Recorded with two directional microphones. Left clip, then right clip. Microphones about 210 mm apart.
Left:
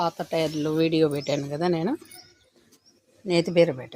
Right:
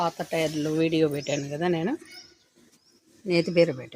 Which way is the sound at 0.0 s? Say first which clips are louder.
Left 1 dB; 15° left (ahead or behind).